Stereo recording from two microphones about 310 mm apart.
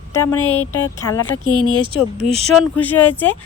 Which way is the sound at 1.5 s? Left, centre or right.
Centre.